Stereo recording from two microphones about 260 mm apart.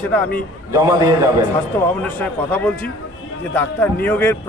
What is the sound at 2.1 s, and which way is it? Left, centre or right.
A man's voice, centre.